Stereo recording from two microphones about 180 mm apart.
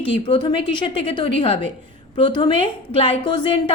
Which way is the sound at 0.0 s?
30° left (ahead or behind).